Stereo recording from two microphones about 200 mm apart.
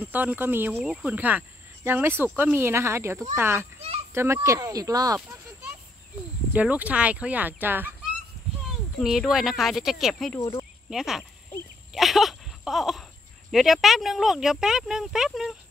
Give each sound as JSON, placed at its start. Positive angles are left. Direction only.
{"t": 0.0, "sound": "speech", "side_deg": -10}
{"t": 9.0, "sound": "speech", "side_deg": 0}
{"t": 11.9, "sound": "a sound", "side_deg": 0}
{"t": 13.5, "sound": "speech", "side_deg": 0}